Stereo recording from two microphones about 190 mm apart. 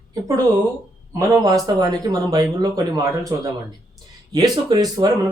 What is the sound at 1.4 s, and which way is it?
Speech, 20° right (ahead or behind).